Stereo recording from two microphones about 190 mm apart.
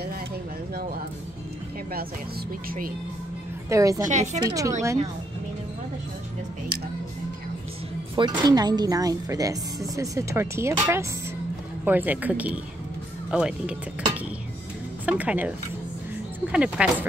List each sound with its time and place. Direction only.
3.6 s a woman's voice: 15° right (ahead or behind)
4.1 s speech: 40° right (ahead or behind)
4.4 s speech: 20° right (ahead or behind)
8.2 s speech: 20° right (ahead or behind); by 13.7 s 5° right (ahead or behind)
15.0 s speech: 5° right (ahead or behind)
16.5 s speech: 5° right (ahead or behind)